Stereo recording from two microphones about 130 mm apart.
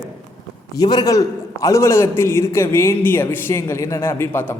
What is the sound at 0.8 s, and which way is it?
A man's voice, 30° left (ahead or behind).